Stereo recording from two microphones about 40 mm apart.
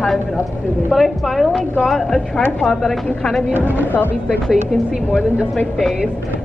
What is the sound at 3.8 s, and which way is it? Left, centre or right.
Speech, left.